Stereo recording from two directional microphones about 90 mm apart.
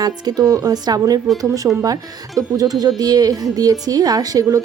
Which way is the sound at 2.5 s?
45° right (ahead or behind).